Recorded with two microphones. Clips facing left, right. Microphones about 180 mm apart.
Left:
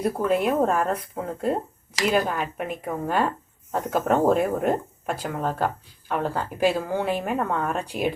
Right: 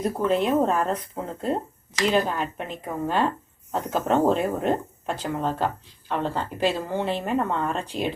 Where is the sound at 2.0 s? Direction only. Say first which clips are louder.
Even; 5° left (ahead or behind).